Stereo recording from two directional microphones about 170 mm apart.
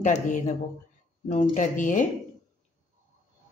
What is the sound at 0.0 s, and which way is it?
Speech, 45° left (ahead or behind).